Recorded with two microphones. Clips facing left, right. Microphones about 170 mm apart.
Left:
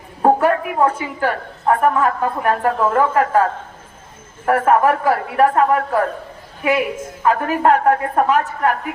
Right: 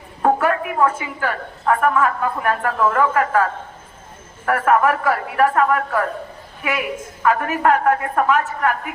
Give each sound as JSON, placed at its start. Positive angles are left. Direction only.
{"t": 0.2, "sound": "a woman's voice", "side_deg": 30}
{"t": 4.4, "sound": "a woman's voice", "side_deg": 30}